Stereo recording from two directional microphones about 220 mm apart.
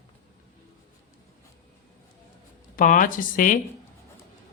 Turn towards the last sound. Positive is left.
turn(degrees=35)  # may be behind; listen again after turning